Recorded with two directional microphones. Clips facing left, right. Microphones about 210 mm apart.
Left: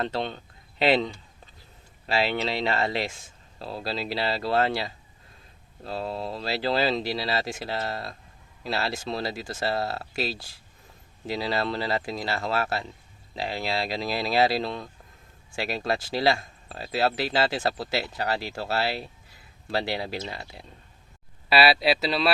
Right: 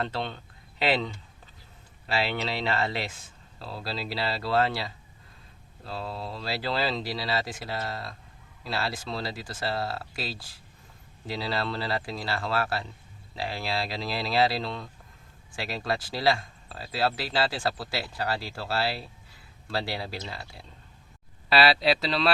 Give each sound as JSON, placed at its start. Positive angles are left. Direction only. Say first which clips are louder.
{"t": 0.8, "sound": "speech", "louder": "left 4 dB", "side_deg": 25}
{"t": 5.9, "sound": "speech", "louder": "left 4 dB", "side_deg": 25}
{"t": 21.5, "sound": "speech", "louder": "left 1 dB", "side_deg": 10}